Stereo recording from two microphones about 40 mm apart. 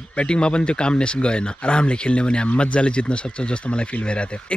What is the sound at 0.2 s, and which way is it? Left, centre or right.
Speech, left.